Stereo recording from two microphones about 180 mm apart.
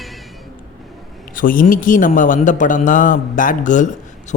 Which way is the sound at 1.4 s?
50° left (ahead or behind).